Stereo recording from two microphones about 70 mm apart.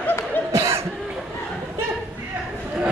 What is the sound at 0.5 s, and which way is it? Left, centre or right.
Cough, right.